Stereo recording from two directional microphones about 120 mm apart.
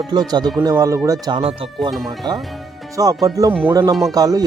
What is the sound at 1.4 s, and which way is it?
Speech, 50° right (ahead or behind).